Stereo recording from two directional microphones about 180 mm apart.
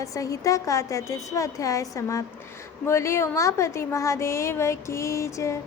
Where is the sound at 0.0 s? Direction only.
20° left (ahead or behind).